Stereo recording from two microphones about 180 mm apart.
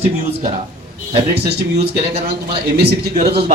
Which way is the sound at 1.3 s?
65° right (ahead or behind).